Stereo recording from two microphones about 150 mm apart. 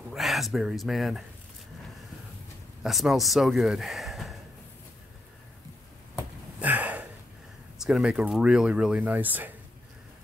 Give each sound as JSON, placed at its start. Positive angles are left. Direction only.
{"t": 0.1, "sound": "speech", "side_deg": 0}
{"t": 2.8, "sound": "speech", "side_deg": 0}
{"t": 6.1, "sound": "a sound", "side_deg": -10}
{"t": 7.8, "sound": "speech", "side_deg": -5}